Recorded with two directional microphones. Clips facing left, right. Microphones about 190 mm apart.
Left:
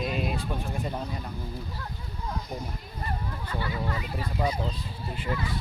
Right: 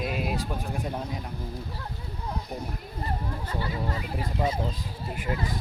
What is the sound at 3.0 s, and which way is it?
Speech, 25° right (ahead or behind).